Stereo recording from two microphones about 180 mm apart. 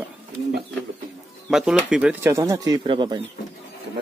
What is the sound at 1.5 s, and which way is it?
Speech, 5° right (ahead or behind).